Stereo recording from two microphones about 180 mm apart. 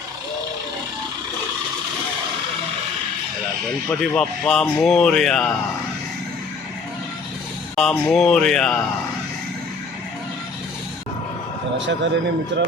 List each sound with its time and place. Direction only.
3.8 s speech: 5° left (ahead or behind)
7.8 s speech: centre (ahead or behind)
12.5 s speech: 75° right (ahead or behind)